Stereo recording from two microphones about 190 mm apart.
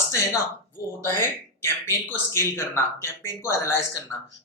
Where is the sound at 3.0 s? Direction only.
15° left (ahead or behind).